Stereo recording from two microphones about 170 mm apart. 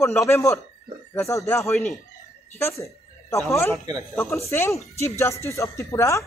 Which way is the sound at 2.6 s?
15° left (ahead or behind).